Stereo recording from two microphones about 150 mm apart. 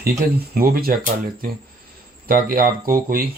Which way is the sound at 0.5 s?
75° right (ahead or behind).